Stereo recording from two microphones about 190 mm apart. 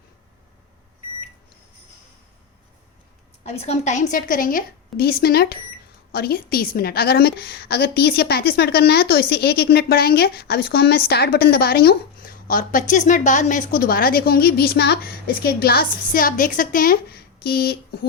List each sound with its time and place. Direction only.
3.4 s a woman's voice: 35° left (ahead or behind); by 17.7 s 55° left (ahead or behind)